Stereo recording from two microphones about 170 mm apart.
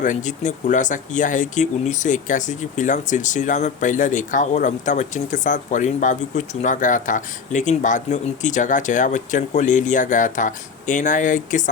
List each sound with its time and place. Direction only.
0.0 s speech: 45° left (ahead or behind)